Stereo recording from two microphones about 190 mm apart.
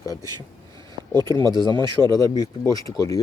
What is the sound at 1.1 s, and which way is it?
Speech, 20° right (ahead or behind).